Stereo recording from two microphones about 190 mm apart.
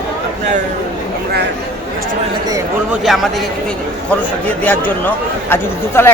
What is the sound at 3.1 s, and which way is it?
Speech, centre (ahead or behind).